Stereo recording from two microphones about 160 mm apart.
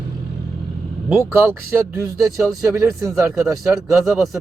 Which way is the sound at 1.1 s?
15° right (ahead or behind).